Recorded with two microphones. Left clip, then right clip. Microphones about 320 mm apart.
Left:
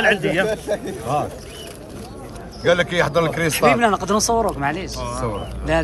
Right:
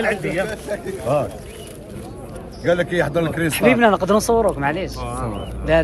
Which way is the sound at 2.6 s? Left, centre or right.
Left.